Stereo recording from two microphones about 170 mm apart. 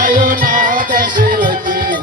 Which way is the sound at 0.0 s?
55° right (ahead or behind).